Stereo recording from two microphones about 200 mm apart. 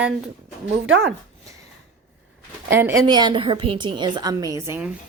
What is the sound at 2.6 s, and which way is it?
A woman's voice, 10° right (ahead or behind).